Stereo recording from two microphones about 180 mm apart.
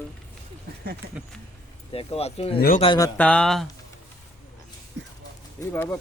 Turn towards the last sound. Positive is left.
turn(degrees=10)  # may be behind; listen again after turning